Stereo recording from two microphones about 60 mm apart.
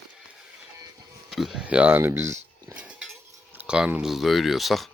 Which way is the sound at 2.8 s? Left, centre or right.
Right.